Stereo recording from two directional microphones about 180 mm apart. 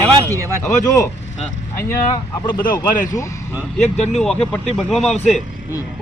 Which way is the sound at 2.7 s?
20° left (ahead or behind).